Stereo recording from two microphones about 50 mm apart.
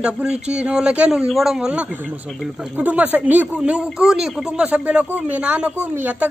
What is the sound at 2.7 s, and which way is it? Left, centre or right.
Speech, right.